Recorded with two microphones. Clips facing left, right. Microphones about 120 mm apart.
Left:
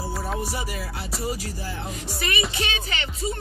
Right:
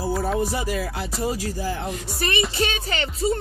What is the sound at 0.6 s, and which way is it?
Music, 90° right.